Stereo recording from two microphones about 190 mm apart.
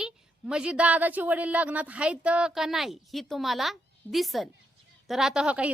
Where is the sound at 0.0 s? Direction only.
5° right (ahead or behind).